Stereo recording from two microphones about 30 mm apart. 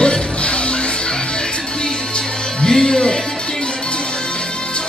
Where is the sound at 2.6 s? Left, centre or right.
Left.